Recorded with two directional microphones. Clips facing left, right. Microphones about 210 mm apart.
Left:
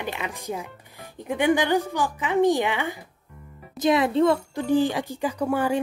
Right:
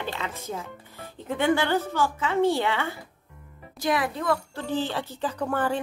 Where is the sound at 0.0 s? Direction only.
15° left (ahead or behind).